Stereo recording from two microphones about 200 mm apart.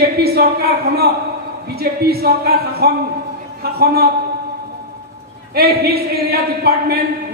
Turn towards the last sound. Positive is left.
turn(degrees=-50)  # may be behind; listen again after turning